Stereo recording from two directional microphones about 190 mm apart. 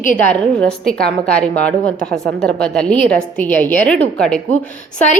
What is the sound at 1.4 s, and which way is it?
A woman's voice, 5° left (ahead or behind).